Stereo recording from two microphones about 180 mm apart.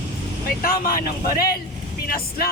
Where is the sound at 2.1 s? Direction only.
55° left (ahead or behind).